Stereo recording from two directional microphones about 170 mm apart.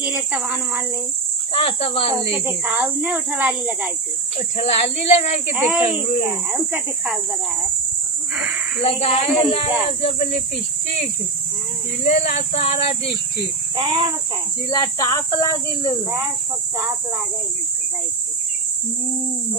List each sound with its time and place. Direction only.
0.0 s speech: 10° right (ahead or behind)
1.5 s speech: 35° left (ahead or behind)
2.4 s speech: 10° right (ahead or behind)
4.4 s speech: 40° left (ahead or behind)
5.5 s speech: 5° right (ahead or behind)
5.9 s speech: 40° left (ahead or behind)
6.2 s speech: 15° right (ahead or behind)
8.4 s speech: 5° right (ahead or behind)
8.8 s speech: 35° left (ahead or behind)
13.7 s speech: 25° right (ahead or behind)
14.7 s speech: 20° left (ahead or behind)